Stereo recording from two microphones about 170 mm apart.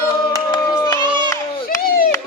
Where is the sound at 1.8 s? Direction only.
60° left (ahead or behind).